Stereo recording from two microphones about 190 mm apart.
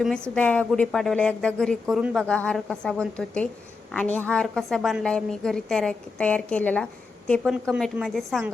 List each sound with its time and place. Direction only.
0.0 s a woman's voice: 5° left (ahead or behind)